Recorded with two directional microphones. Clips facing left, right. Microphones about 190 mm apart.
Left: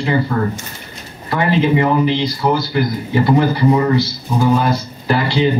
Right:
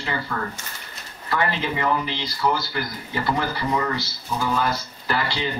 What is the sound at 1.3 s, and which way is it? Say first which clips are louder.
Speech: left 10 dB; 20° left (ahead or behind).